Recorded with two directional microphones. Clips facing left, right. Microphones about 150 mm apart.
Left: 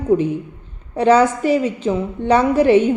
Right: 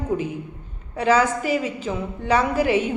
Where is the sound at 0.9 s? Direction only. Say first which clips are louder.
Left 6 dB; 30° left (ahead or behind).